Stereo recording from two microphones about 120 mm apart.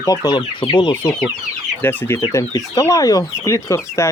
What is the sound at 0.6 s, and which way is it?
Speech, 40° left (ahead or behind).